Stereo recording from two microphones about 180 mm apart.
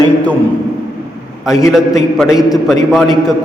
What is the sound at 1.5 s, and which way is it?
Speech, 15° left (ahead or behind).